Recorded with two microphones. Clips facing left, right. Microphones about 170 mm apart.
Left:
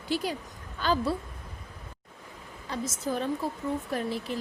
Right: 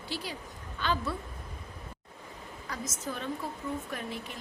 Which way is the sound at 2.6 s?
30° left (ahead or behind).